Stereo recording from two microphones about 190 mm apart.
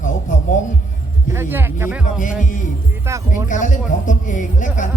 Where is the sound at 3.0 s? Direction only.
15° right (ahead or behind).